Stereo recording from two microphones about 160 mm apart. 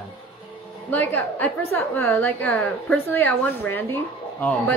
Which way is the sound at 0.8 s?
10° left (ahead or behind).